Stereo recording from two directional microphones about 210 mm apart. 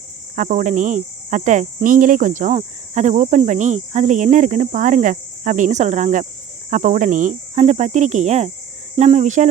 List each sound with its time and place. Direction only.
0.3 s speech: 35° right (ahead or behind)